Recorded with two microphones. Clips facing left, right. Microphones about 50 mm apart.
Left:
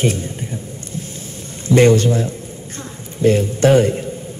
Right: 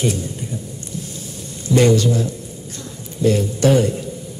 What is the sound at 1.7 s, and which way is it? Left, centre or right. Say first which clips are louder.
A man's voice: left 3 dB; left.